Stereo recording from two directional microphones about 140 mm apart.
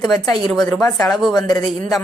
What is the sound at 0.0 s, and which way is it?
Speech, 30° left (ahead or behind).